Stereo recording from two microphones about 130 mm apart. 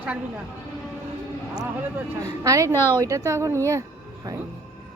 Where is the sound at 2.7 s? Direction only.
20° left (ahead or behind).